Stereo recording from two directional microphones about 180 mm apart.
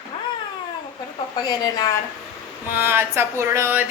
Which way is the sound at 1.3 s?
20° left (ahead or behind).